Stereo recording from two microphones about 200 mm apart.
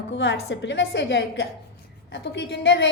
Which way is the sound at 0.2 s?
65° left (ahead or behind).